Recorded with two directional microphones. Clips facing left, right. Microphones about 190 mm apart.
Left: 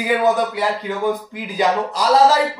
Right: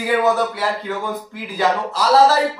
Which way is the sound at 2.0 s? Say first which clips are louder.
Right 1 dB; 15° left (ahead or behind).